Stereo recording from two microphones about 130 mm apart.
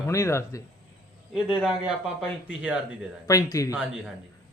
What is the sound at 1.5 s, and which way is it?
Speech, 5° right (ahead or behind).